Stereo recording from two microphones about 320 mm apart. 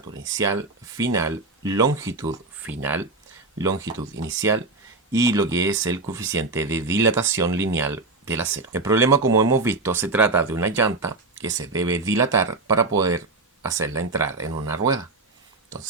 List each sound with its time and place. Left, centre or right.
0.3 s speech: centre
4.1 s speech: right
4.4 s speech: centre